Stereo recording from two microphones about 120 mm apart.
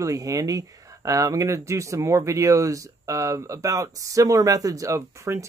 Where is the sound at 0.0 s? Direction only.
30° right (ahead or behind).